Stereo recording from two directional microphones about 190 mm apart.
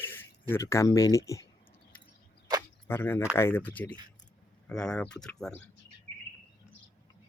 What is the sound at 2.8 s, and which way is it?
Speech, 10° left (ahead or behind).